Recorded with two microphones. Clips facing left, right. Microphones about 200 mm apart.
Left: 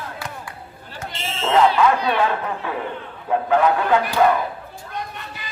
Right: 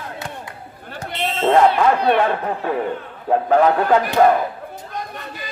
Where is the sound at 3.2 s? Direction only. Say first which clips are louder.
Right 3 dB; 40° right (ahead or behind).